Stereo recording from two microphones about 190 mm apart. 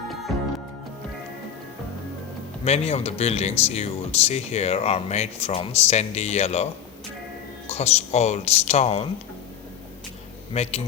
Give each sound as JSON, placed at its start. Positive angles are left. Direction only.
{"t": 2.6, "sound": "speech", "side_deg": 35}
{"t": 7.7, "sound": "speech", "side_deg": 35}
{"t": 10.5, "sound": "speech", "side_deg": 35}